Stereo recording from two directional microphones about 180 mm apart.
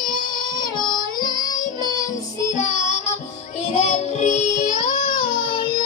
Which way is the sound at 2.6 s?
40° left (ahead or behind).